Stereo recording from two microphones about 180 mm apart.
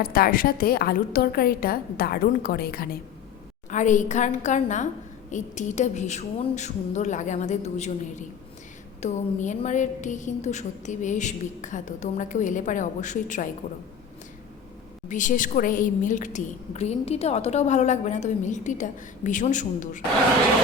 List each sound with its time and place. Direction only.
0.0 s a woman's voice: 55° left (ahead or behind)
3.7 s a woman's voice: 45° left (ahead or behind)
15.1 s a woman's voice: 45° left (ahead or behind)